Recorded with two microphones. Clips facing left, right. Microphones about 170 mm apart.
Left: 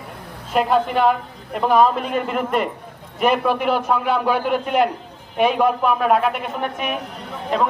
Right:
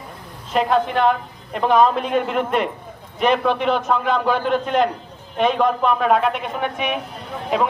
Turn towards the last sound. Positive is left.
turn(degrees=-5)  # may be behind; listen again after turning